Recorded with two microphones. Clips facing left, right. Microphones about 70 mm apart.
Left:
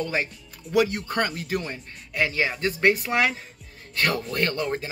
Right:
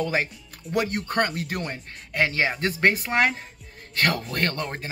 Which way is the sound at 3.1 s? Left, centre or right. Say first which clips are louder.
Right 1 dB; right.